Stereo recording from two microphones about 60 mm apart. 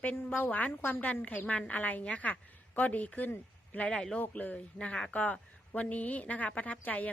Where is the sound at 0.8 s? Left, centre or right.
Left.